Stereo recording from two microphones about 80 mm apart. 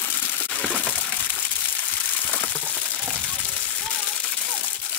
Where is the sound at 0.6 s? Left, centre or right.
Centre.